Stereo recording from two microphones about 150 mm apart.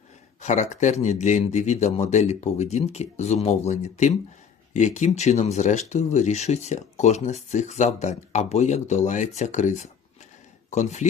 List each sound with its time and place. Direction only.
0.4 s speech: 55° left (ahead or behind)